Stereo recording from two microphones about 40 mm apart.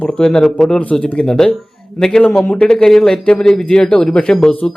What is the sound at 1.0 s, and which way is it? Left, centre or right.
Speech, left.